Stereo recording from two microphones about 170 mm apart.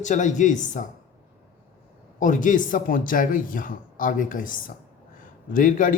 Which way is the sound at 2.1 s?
50° left (ahead or behind).